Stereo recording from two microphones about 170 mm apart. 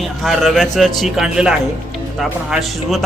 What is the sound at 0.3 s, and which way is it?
Speech, centre (ahead or behind).